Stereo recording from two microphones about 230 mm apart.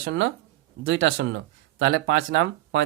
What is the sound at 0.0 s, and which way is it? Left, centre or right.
Speech, right.